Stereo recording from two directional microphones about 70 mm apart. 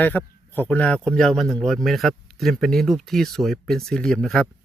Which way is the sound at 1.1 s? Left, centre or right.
Centre.